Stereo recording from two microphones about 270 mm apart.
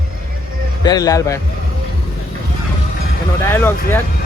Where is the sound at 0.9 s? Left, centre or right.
Centre.